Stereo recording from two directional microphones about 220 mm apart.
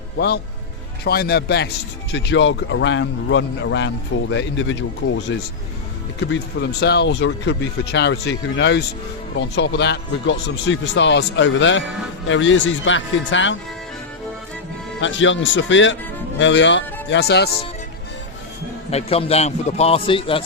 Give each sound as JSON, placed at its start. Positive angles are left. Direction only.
{"t": 1.0, "sound": "speech", "side_deg": 45}
{"t": 15.0, "sound": "speech", "side_deg": 60}
{"t": 18.9, "sound": "a man's voice", "side_deg": 30}